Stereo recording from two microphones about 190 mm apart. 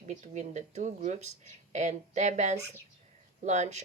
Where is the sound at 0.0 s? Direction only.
40° right (ahead or behind).